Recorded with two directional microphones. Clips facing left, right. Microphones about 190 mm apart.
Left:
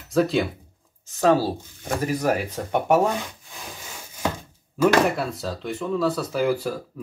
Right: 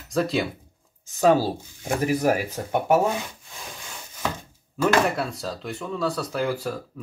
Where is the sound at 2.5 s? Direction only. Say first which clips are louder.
Left 1 dB; centre (ahead or behind).